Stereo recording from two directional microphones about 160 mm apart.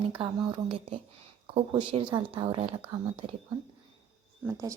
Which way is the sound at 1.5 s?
30° right (ahead or behind).